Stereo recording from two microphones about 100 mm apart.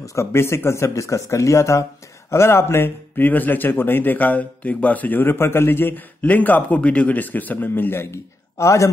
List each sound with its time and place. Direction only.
0.0 s speech: 30° left (ahead or behind)